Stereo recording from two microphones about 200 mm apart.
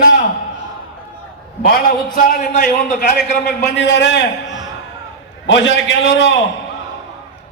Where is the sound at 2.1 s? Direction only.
45° left (ahead or behind).